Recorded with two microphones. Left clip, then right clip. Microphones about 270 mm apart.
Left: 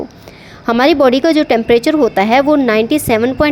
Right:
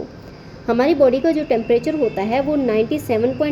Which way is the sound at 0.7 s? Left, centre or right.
Left.